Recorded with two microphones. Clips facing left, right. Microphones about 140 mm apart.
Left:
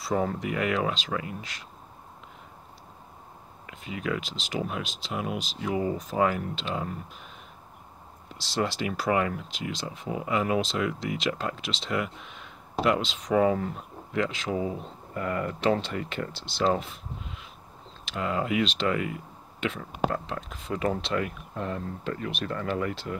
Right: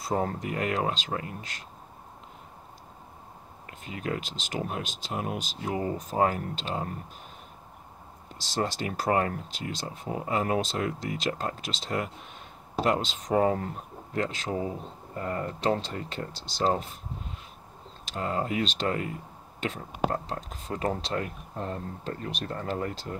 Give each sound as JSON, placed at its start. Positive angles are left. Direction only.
{"t": 0.0, "sound": "speech", "side_deg": -45}
{"t": 3.6, "sound": "speech", "side_deg": -40}
{"t": 8.4, "sound": "speech", "side_deg": -45}
{"t": 15.1, "sound": "speech", "side_deg": -30}